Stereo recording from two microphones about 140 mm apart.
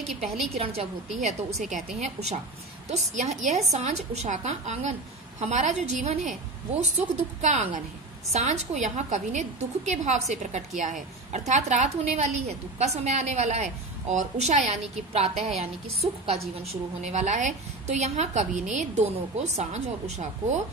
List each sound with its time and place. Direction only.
0.6 s a woman's voice: 45° right (ahead or behind)